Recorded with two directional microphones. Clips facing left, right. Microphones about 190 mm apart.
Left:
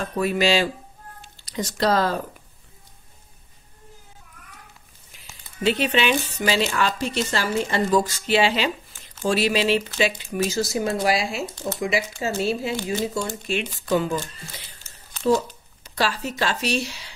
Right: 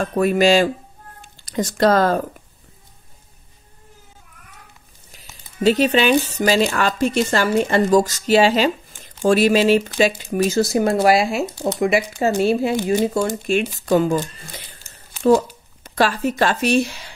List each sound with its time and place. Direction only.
0.0 s speech: 50° right (ahead or behind)
5.1 s speech: 40° right (ahead or behind)
15.8 s speech: 55° right (ahead or behind)